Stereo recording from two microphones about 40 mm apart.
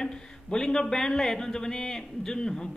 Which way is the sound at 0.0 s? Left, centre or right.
Centre.